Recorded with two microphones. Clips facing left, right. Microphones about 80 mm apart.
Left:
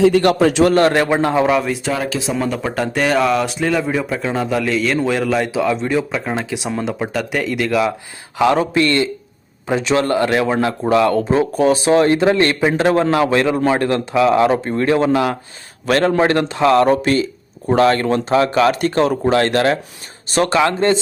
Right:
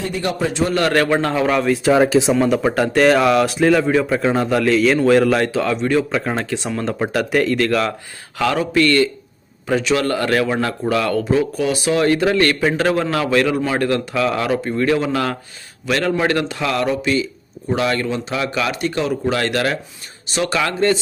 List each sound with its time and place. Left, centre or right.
0.0 s a man's voice: left
0.9 s a man's voice: centre
1.5 s a man's voice: centre
1.9 s speech: right
2.7 s a man's voice: centre
5.5 s a man's voice: centre
6.1 s a man's voice: centre
7.0 s a man's voice: centre
8.4 s a man's voice: left
16.8 s a man's voice: left
19.3 s a man's voice: left
20.6 s a man's voice: left